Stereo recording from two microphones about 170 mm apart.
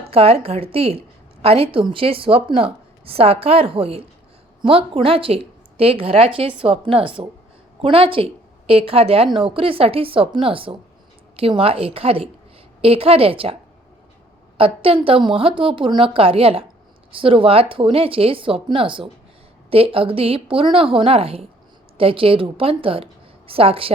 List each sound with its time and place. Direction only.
0.1 s a woman's voice: 35° right (ahead or behind)
14.6 s a woman's voice: 35° right (ahead or behind)